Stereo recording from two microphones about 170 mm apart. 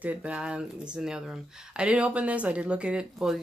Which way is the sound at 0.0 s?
10° right (ahead or behind).